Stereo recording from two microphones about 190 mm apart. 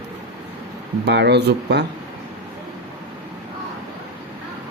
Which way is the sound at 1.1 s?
60° right (ahead or behind).